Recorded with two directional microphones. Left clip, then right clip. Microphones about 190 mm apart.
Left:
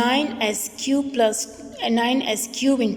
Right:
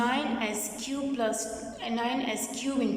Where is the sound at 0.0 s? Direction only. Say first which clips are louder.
Left 8 dB; 45° left (ahead or behind).